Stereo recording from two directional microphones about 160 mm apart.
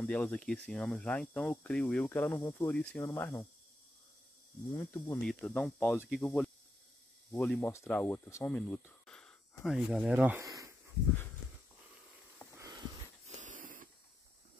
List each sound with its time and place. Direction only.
0.0 s speech: 10° left (ahead or behind)
4.7 s speech: 15° left (ahead or behind)
5.2 s speech: 5° left (ahead or behind)
10.4 s speech: 20° right (ahead or behind)
12.5 s a sound: 20° right (ahead or behind)
13.4 s a sound: 55° right (ahead or behind)